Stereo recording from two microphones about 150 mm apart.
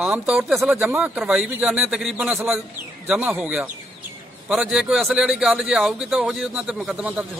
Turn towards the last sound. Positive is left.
turn(degrees=-5)  # may be behind; listen again after turning